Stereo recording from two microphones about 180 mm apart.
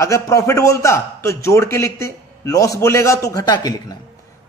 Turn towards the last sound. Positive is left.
turn(degrees=20)  # may be behind; listen again after turning